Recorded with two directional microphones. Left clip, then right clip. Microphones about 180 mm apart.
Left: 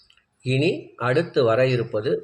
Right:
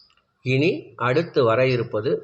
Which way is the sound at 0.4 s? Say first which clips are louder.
Right 1 dB; 10° right (ahead or behind).